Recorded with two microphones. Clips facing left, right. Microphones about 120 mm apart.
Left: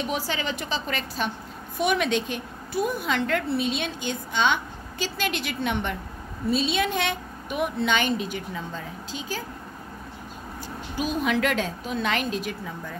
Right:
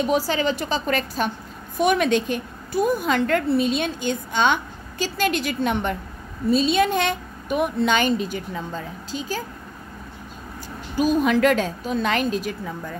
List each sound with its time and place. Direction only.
0.0 s a woman's voice: 40° right (ahead or behind)
11.0 s a woman's voice: 40° right (ahead or behind)